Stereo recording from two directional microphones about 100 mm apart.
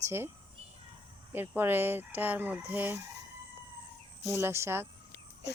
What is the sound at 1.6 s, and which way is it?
Speech, 20° right (ahead or behind).